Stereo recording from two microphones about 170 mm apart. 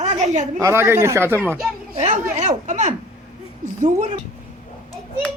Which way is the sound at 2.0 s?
40° right (ahead or behind).